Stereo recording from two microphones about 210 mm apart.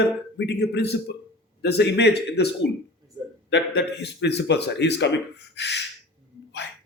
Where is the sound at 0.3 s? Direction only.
50° left (ahead or behind).